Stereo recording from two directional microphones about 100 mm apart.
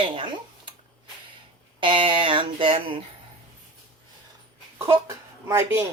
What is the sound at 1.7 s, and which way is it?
Speech, 55° right (ahead or behind).